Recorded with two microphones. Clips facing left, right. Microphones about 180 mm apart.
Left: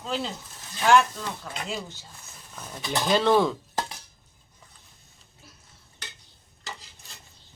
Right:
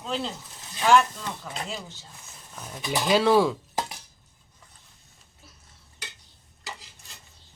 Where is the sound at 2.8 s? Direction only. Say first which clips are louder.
Right 1 dB; 5° right (ahead or behind).